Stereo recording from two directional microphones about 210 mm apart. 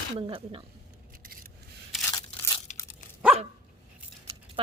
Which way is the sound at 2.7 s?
35° left (ahead or behind).